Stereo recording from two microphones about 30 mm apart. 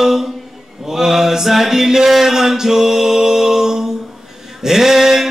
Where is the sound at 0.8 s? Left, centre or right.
Centre.